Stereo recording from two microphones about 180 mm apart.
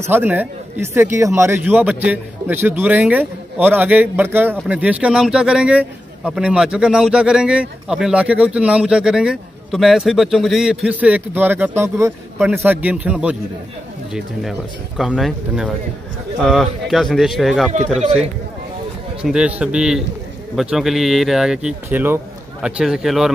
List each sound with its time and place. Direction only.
0.0 s a man's voice: 10° right (ahead or behind)
15.0 s speech: centre (ahead or behind)
17.9 s a man's voice: 40° right (ahead or behind)
19.2 s speech: 5° right (ahead or behind)